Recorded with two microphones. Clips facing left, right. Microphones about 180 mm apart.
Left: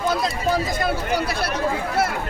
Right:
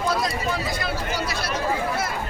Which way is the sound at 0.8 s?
60° left (ahead or behind).